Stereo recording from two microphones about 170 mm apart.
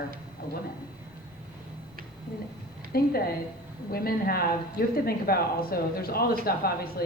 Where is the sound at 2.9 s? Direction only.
65° left (ahead or behind).